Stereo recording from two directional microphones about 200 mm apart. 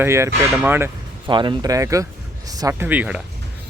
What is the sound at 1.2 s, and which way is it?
Speech, 25° right (ahead or behind).